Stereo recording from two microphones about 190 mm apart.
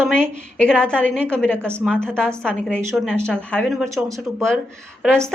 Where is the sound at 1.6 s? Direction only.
15° right (ahead or behind).